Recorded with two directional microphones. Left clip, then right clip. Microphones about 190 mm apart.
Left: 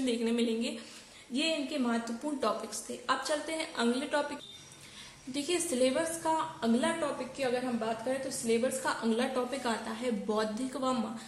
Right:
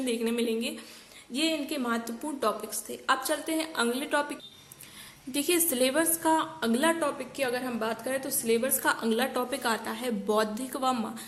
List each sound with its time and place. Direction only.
0.0 s a woman's voice: 30° right (ahead or behind)
1.3 s a woman's voice: 40° right (ahead or behind)
5.3 s a woman's voice: 40° right (ahead or behind)